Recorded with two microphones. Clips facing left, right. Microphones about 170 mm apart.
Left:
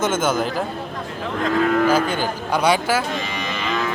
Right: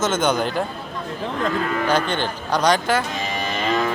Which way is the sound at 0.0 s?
5° left (ahead or behind).